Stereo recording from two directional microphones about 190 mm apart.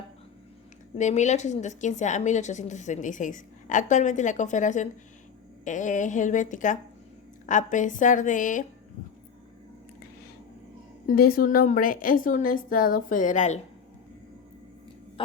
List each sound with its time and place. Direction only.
0.9 s a woman's voice: 40° left (ahead or behind)
11.0 s a woman's voice: 50° left (ahead or behind)